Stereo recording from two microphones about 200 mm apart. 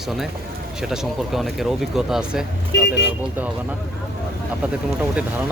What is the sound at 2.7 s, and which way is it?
Speech, 60° left (ahead or behind).